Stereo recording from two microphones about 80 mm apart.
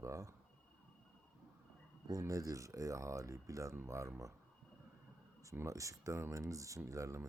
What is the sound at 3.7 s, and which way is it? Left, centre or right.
Speech, right.